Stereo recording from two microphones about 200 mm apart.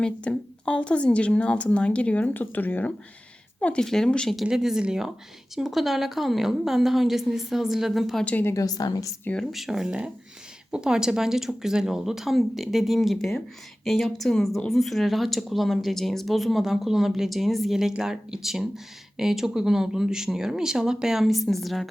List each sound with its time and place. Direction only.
0.0 s speech: 5° left (ahead or behind)
9.3 s speech: centre (ahead or behind)